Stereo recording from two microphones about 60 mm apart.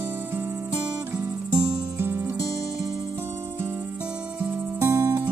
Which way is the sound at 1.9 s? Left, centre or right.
Right.